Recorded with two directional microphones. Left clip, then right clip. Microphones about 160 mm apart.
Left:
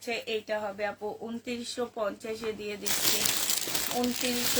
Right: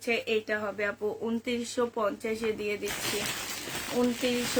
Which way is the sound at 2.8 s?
90° left.